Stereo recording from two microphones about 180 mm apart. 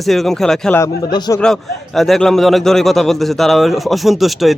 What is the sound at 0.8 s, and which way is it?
Speech, 20° left (ahead or behind).